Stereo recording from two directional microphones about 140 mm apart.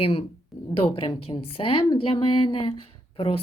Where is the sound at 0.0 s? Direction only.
45° left (ahead or behind).